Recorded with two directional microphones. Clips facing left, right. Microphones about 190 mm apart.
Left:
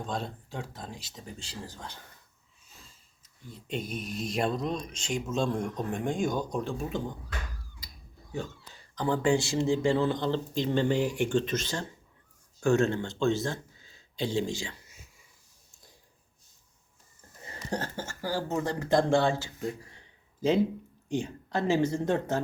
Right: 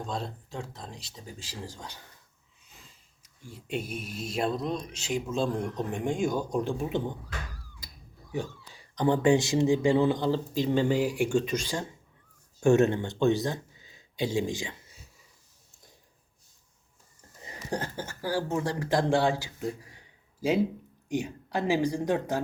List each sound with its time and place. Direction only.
0.0 s speech: centre (ahead or behind)
1.4 s speech: 10° right (ahead or behind)
3.2 s speech: 10° right (ahead or behind)
9.0 s speech: 20° right (ahead or behind)
17.4 s a sound: 15° right (ahead or behind)
18.2 s speech: 10° right (ahead or behind)
21.1 s speech: 10° right (ahead or behind)